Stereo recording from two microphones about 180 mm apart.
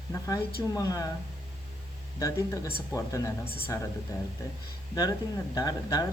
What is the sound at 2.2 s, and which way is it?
Speech, 15° left (ahead or behind).